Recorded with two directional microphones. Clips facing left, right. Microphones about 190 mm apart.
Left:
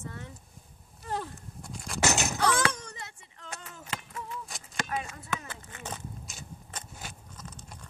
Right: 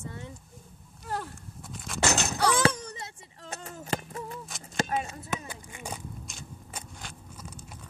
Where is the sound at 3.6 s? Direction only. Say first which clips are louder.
Right 11 dB; 35° right (ahead or behind).